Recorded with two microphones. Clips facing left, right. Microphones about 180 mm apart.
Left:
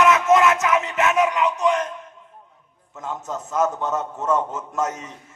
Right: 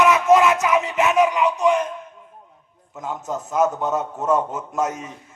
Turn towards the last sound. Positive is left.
turn(degrees=-10)  # may be behind; listen again after turning